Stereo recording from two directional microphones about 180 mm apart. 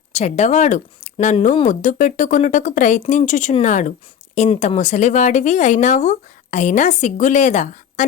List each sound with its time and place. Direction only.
0.1 s speech: 40° left (ahead or behind)